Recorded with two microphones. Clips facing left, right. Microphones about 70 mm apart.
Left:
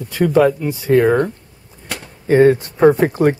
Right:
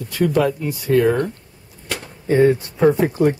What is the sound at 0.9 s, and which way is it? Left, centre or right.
Speech, left.